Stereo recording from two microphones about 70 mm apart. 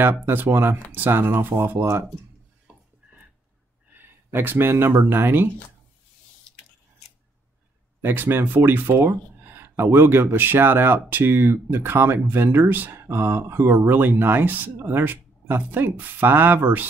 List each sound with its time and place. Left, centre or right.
0.0 s speech: right
3.9 s speech: right
8.0 s speech: right